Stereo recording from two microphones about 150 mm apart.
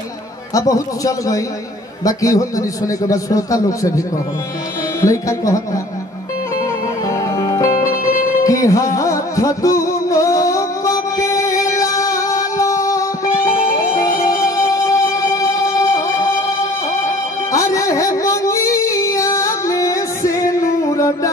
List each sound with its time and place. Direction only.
0.6 s a man's voice: 25° left (ahead or behind)
5.0 s a man's voice: 20° left (ahead or behind)
7.1 s music: 25° left (ahead or behind)
17.5 s music: 20° left (ahead or behind)